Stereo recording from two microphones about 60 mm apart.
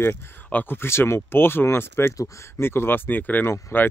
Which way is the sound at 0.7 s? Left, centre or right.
Left.